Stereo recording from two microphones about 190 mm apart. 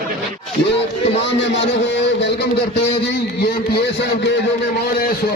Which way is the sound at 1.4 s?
70° left (ahead or behind).